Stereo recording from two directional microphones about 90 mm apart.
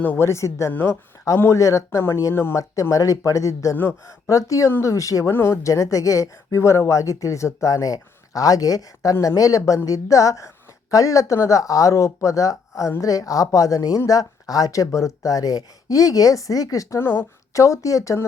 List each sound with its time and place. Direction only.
0.2 s speech: 30° left (ahead or behind)
0.7 s speech: 20° left (ahead or behind)
1.4 s speech: 35° left (ahead or behind)
17.0 s speech: 25° left (ahead or behind)